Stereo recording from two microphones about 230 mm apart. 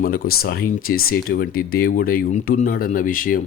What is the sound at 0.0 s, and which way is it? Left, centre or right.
A man's voice, left.